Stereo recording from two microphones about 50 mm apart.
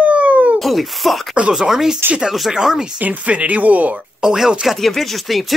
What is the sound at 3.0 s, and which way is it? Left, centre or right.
Speech, right.